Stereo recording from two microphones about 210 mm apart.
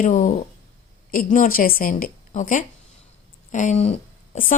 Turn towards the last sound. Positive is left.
turn(degrees=30)  # may be behind; listen again after turning